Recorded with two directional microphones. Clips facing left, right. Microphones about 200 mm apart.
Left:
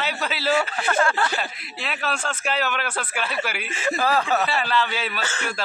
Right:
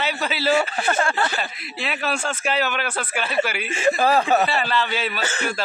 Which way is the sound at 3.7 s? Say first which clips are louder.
Right 4 dB; 25° right (ahead or behind).